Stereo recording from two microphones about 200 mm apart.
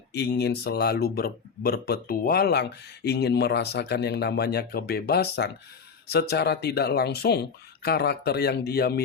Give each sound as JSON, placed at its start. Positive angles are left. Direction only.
{"t": 0.1, "sound": "speech", "side_deg": 55}